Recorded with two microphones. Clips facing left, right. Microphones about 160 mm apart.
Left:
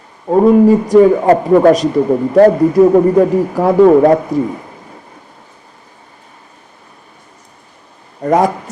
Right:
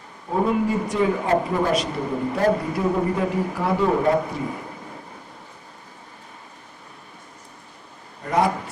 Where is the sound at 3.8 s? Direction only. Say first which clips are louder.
Left 11 dB; 90° left.